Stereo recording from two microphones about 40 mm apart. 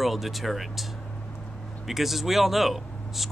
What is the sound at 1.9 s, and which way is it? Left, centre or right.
Speech, centre.